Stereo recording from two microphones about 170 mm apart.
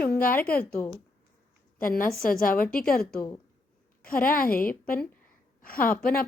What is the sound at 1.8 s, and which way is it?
A woman's voice, 55° left (ahead or behind).